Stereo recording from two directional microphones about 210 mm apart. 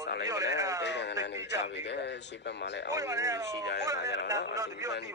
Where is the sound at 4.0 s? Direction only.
55° left (ahead or behind).